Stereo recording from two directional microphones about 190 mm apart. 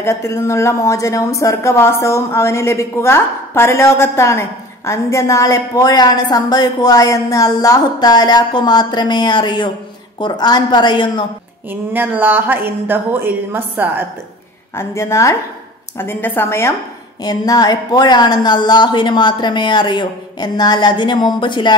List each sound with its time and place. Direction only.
0.0 s a woman's voice: 15° left (ahead or behind)
11.7 s a woman's voice: 10° right (ahead or behind)
14.8 s a woman's voice: 15° left (ahead or behind)